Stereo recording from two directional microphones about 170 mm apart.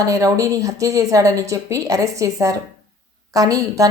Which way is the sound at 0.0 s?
20° right (ahead or behind).